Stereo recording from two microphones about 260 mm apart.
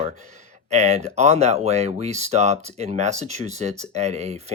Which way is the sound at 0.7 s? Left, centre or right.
Right.